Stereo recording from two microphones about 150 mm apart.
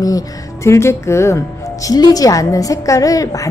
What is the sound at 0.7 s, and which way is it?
Speech, 20° left (ahead or behind).